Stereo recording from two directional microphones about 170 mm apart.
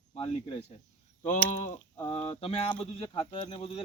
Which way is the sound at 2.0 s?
35° left (ahead or behind).